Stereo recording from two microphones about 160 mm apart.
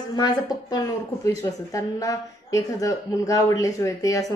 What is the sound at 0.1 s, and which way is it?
A woman's voice, 25° left (ahead or behind).